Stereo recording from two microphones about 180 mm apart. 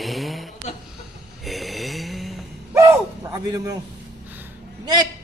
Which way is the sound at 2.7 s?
15° right (ahead or behind).